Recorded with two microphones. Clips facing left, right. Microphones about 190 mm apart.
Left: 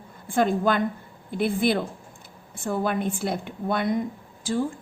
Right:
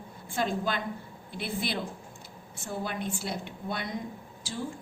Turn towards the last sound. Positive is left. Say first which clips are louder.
# left 11 dB
turn(degrees=50)  # may be behind; listen again after turning